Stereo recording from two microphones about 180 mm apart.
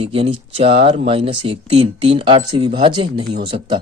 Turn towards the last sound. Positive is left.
turn(degrees=-30)  # may be behind; listen again after turning